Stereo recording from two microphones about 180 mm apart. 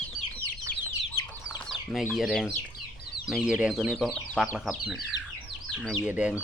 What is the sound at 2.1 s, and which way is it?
Speech, centre (ahead or behind).